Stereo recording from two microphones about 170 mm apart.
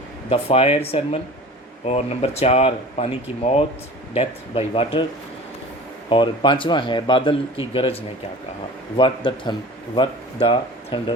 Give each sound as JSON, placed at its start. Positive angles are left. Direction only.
{"t": 0.3, "sound": "speech", "side_deg": 35}
{"t": 6.1, "sound": "speech", "side_deg": 30}
{"t": 9.0, "sound": "speech", "side_deg": 30}